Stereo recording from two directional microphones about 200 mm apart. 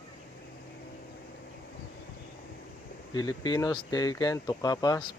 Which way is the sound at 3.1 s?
20° left (ahead or behind).